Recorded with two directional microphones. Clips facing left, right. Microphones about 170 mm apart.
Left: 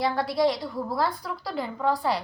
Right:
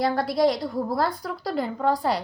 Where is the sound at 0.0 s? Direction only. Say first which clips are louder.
Right 2 dB; 45° right (ahead or behind).